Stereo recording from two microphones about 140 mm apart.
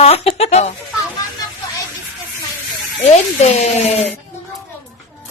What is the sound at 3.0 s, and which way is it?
A woman's voice, 55° left (ahead or behind).